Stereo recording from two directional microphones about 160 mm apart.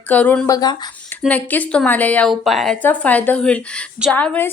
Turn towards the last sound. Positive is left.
turn(degrees=10)  # may be behind; listen again after turning